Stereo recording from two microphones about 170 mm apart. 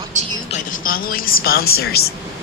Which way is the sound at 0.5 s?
55° left (ahead or behind).